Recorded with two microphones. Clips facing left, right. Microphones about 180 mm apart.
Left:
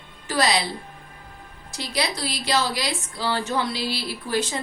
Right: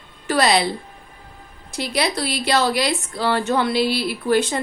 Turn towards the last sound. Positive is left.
turn(degrees=-65)  # may be behind; listen again after turning